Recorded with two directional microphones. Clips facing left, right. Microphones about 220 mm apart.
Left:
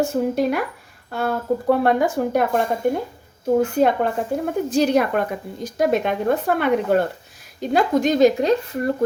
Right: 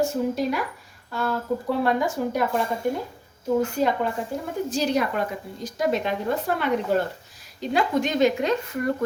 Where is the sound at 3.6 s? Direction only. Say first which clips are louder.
Left 5 dB; 55° left (ahead or behind).